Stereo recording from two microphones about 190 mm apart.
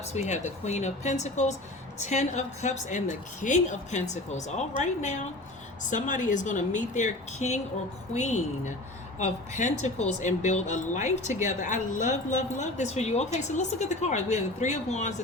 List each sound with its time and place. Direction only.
0.1 s speech: 35° left (ahead or behind)